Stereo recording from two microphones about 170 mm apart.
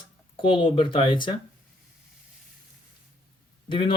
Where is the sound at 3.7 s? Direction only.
30° left (ahead or behind).